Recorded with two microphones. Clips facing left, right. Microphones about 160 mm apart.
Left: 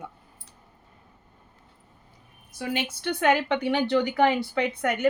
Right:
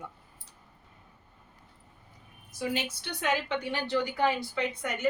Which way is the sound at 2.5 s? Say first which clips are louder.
Left 2 dB; 60° left (ahead or behind).